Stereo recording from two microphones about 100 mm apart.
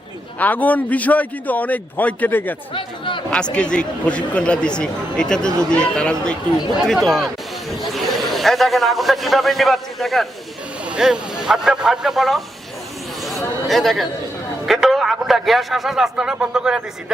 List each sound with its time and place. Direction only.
0.3 s a man's voice: 15° left (ahead or behind)
2.7 s speech: 55° left (ahead or behind)
3.5 s a man's voice: 10° left (ahead or behind)
13.7 s a man's voice: centre (ahead or behind)